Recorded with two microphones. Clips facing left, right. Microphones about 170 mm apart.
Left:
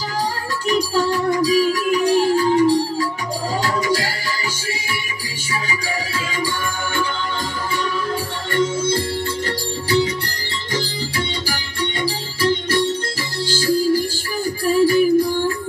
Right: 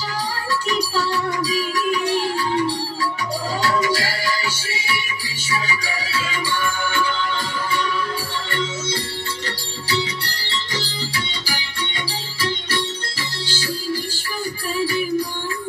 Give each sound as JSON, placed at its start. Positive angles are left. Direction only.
{"t": 0.7, "sound": "music", "side_deg": 50}
{"t": 8.5, "sound": "music", "side_deg": 50}
{"t": 12.1, "sound": "music", "side_deg": 50}